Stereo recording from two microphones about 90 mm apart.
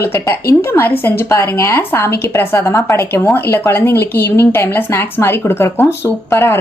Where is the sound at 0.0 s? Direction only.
25° left (ahead or behind).